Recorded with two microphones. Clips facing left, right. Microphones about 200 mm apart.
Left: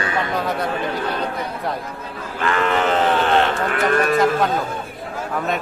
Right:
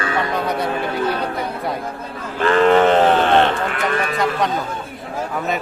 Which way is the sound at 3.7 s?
45° left (ahead or behind).